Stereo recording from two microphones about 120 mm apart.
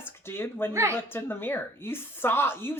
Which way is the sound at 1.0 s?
20° left (ahead or behind).